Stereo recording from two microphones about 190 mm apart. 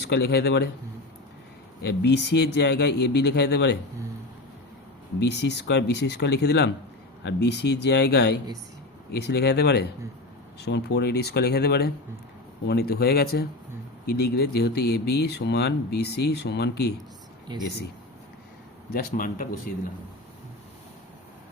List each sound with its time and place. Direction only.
0.0 s speech: 60° left (ahead or behind)
1.8 s speech: 60° left (ahead or behind)
5.2 s speech: 60° left (ahead or behind)
17.5 s speech: 25° right (ahead or behind)
18.9 s speech: 50° left (ahead or behind)